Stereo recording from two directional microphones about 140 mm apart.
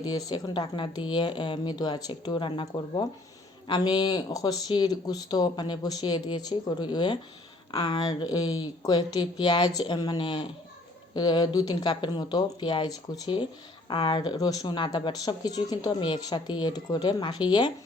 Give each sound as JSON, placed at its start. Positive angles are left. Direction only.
{"t": 0.0, "sound": "speech", "side_deg": 30}